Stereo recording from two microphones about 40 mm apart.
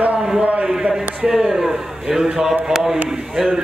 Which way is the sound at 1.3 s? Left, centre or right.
Centre.